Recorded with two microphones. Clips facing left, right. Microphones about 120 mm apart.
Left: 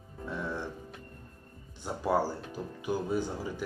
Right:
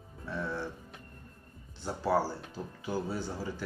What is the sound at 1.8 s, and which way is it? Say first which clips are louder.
Speech: left 1 dB; 15° left (ahead or behind).